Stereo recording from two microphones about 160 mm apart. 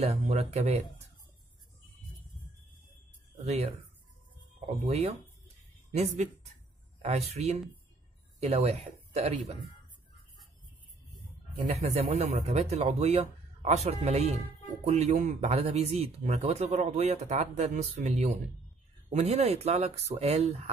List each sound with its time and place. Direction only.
0.0 s speech: 40° right (ahead or behind)
3.3 s a woman's voice: 40° right (ahead or behind)
11.5 s speech: 40° right (ahead or behind)